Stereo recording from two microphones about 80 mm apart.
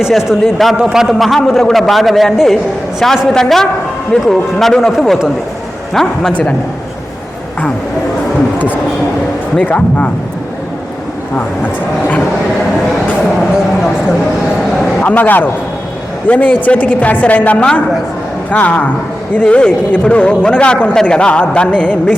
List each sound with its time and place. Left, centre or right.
0.0 s a man's voice: centre
8.5 s speech: left
15.0 s a woman's voice: left